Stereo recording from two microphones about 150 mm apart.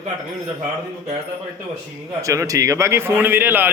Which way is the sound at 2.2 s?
20° right (ahead or behind).